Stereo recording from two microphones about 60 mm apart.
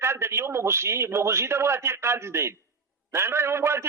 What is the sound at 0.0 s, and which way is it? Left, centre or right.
A man's voice, right.